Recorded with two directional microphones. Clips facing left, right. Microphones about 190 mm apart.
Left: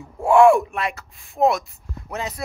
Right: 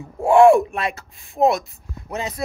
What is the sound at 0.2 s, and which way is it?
Speech, 25° right (ahead or behind).